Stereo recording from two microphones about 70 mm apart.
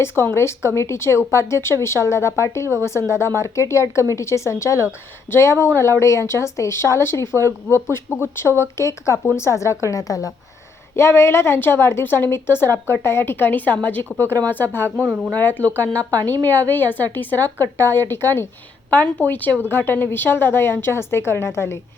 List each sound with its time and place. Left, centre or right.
0.3 s a woman's voice: left
10.9 s a woman's voice: left
14.8 s speech: right
15.3 s a woman's voice: left